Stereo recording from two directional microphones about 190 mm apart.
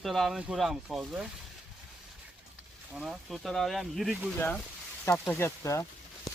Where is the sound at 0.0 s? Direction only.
Centre (ahead or behind).